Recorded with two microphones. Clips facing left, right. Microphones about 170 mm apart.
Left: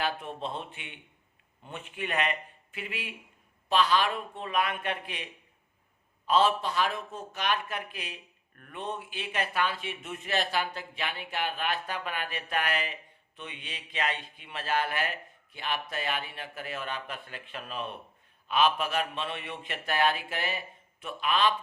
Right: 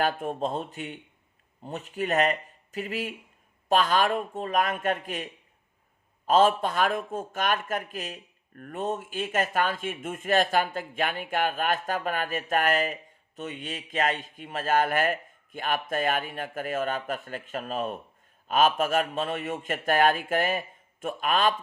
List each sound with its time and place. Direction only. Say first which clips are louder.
0.0 s a man's voice: right 6 dB; 45° right (ahead or behind)